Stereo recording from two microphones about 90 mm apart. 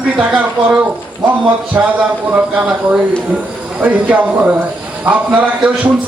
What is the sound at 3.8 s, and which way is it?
A man's voice, 15° right (ahead or behind).